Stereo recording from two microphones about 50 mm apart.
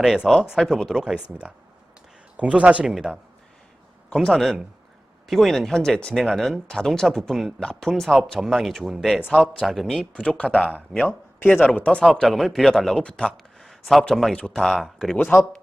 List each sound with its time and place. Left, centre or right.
0.0 s speech: centre
0.6 s speech: centre
0.9 s speech: centre
1.3 s speech: right
3.1 s speech: left
4.1 s speech: centre
9.4 s speech: centre
10.2 s speech: left
12.1 s speech: centre
13.0 s speech: centre
15.2 s speech: left